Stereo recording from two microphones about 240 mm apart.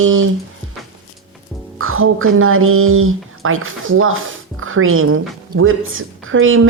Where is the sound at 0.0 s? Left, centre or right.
Right.